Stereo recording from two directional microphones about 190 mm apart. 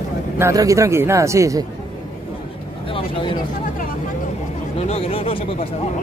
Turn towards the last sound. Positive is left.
turn(degrees=30)  # may be behind; listen again after turning